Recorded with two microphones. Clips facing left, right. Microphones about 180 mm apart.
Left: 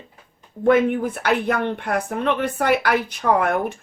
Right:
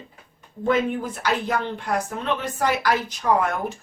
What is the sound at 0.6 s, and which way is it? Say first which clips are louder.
Speech: left 5 dB; 60° left (ahead or behind).